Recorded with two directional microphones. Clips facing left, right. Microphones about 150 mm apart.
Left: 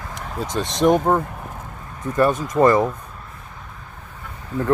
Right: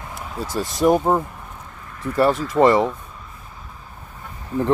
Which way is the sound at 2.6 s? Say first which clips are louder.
Even; 25° right (ahead or behind).